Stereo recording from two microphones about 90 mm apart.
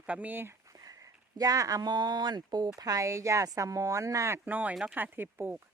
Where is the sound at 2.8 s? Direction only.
40° right (ahead or behind).